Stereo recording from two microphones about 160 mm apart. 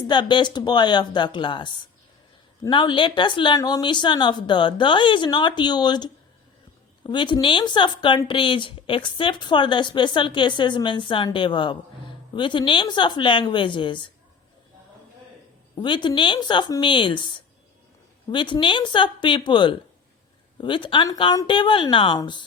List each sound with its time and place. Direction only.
0.1 s speech: 30° left (ahead or behind)
15.8 s speech: 30° left (ahead or behind)